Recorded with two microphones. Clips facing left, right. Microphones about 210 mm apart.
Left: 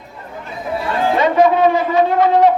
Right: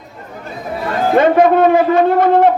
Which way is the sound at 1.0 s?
50° right (ahead or behind).